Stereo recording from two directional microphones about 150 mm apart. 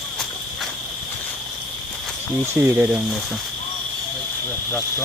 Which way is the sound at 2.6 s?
15° right (ahead or behind).